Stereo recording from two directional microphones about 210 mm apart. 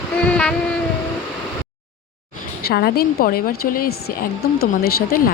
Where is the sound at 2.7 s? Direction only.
50° left (ahead or behind).